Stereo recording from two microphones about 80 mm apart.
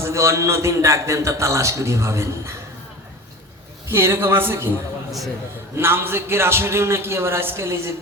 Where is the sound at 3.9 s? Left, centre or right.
Right.